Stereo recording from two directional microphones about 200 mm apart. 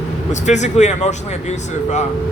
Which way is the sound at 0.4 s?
35° left (ahead or behind).